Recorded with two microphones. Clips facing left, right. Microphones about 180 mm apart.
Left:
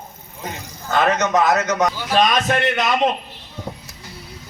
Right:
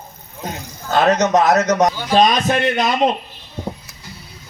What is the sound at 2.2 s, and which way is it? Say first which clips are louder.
Speech: right 2 dB; 25° right (ahead or behind).